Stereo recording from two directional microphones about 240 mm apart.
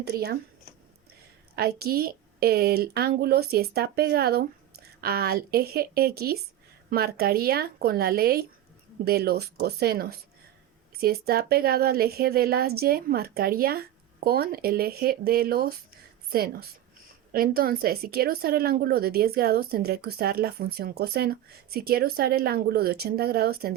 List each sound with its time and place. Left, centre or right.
0.0 s speech: right
1.5 s speech: right